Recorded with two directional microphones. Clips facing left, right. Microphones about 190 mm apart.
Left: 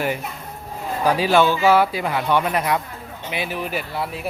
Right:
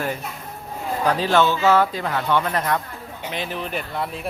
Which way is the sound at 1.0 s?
10° left (ahead or behind).